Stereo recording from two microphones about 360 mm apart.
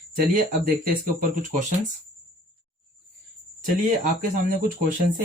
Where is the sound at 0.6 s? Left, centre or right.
Right.